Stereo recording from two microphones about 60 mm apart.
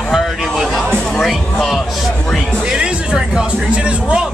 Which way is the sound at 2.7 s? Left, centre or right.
Centre.